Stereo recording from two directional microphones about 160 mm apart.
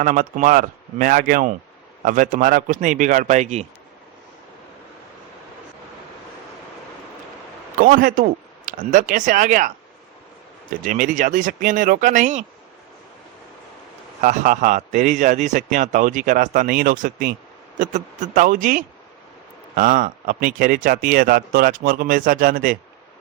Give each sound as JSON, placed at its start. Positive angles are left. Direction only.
{"t": 0.0, "sound": "a man's voice", "side_deg": -55}
{"t": 7.8, "sound": "speech", "side_deg": -60}
{"t": 10.8, "sound": "speech", "side_deg": -55}
{"t": 14.2, "sound": "a man's voice", "side_deg": -55}